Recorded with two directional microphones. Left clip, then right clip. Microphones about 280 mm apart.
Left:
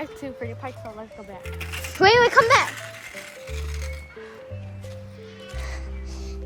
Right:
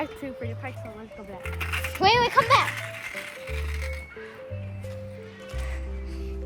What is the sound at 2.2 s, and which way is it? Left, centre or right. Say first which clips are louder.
Speech: left 5 dB; left.